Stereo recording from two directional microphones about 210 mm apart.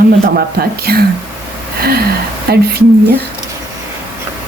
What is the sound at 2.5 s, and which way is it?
Speech, 50° right (ahead or behind).